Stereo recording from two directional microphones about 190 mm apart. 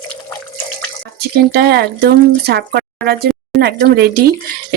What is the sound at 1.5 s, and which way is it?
Speech, 60° right (ahead or behind).